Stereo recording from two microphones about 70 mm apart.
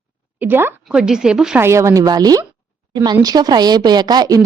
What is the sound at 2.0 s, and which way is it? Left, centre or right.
A woman's voice, right.